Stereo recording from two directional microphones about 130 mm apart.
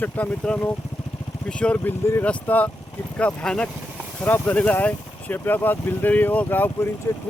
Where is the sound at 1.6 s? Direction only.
10° left (ahead or behind).